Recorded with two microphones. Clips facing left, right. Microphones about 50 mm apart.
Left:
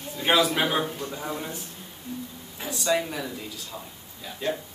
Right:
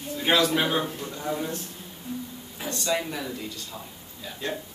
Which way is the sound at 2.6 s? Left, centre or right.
Centre.